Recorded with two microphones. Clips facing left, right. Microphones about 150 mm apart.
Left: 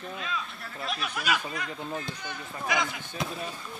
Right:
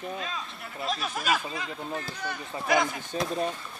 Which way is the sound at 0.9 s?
40° right (ahead or behind).